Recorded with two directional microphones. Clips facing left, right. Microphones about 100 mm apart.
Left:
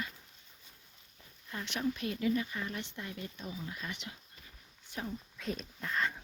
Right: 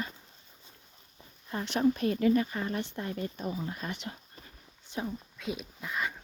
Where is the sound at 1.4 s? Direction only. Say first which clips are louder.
Right 8 dB; 35° right (ahead or behind).